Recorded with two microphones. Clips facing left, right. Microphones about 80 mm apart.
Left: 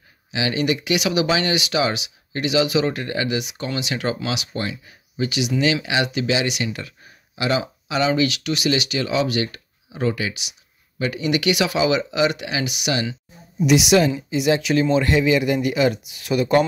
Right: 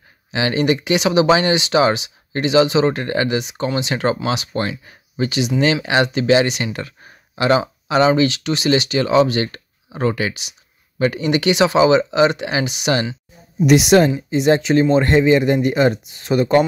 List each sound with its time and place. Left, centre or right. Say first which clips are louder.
0.3 s speech: right 4 dB; right